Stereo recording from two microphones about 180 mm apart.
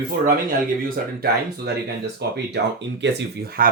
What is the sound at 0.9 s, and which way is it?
Speech, 60° right (ahead or behind).